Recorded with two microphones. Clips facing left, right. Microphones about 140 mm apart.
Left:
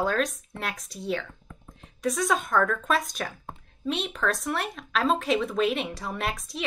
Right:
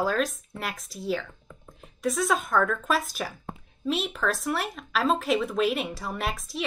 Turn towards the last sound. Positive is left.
turn(degrees=0)  # may be behind; listen again after turning